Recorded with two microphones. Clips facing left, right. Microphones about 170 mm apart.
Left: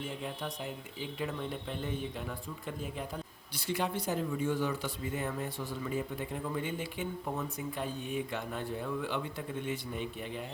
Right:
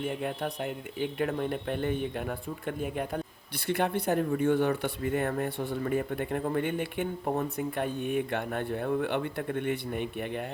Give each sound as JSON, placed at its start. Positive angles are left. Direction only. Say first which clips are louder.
{"t": 0.0, "sound": "speech", "louder": "right 7 dB", "side_deg": -60}